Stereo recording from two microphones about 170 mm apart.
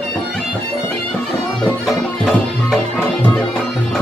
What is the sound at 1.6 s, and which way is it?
Music, centre (ahead or behind).